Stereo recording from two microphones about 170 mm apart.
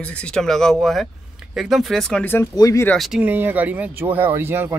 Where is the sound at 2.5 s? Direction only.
20° left (ahead or behind).